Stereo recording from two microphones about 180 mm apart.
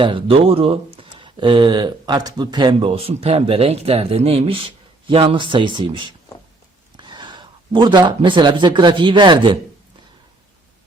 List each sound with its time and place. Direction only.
0.0 s speech: 30° right (ahead or behind)